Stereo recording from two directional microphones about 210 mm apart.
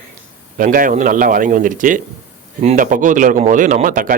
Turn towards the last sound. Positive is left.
turn(degrees=-40)  # may be behind; listen again after turning